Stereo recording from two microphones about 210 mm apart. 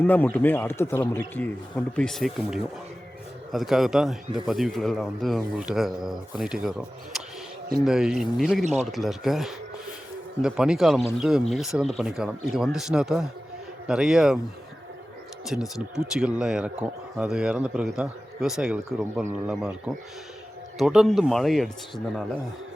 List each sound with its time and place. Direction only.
0.0 s speech: 10° left (ahead or behind)
8.6 s speech: 30° right (ahead or behind)
8.9 s speech: centre (ahead or behind)
15.4 s speech: centre (ahead or behind)